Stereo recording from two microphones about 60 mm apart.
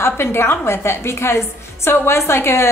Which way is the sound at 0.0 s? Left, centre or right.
Left.